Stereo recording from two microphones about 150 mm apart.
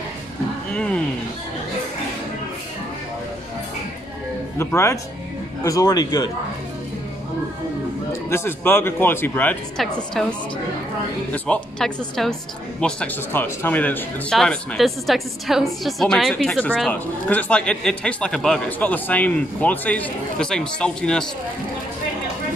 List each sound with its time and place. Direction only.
0.7 s speech: 5° left (ahead or behind)
4.6 s a man's voice: 15° left (ahead or behind)
8.1 s speech: 15° left (ahead or behind)
11.3 s speech: 10° left (ahead or behind)
17.3 s speech: 10° left (ahead or behind)